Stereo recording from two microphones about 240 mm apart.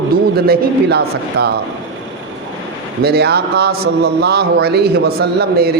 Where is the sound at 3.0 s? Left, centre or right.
Right.